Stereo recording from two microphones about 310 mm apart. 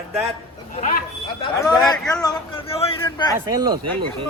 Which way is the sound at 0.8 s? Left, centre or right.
Left.